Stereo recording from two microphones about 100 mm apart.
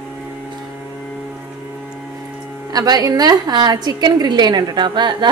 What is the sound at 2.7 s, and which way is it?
A woman's voice, 40° right (ahead or behind).